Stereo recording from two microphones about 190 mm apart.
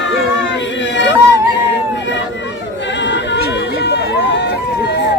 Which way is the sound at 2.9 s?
70° left (ahead or behind).